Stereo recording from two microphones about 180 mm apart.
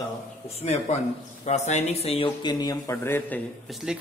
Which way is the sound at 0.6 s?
35° left (ahead or behind).